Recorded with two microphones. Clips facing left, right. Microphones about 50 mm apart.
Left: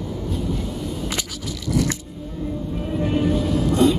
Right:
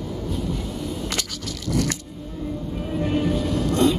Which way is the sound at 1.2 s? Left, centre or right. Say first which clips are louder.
Left 1 dB; centre.